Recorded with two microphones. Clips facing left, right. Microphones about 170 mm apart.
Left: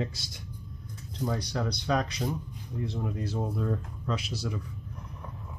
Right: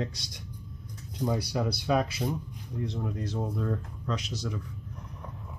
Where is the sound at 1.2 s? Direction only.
10° right (ahead or behind).